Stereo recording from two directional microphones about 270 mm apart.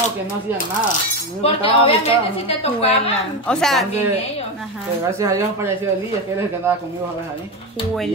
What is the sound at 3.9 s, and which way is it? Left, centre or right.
Cutlery, left.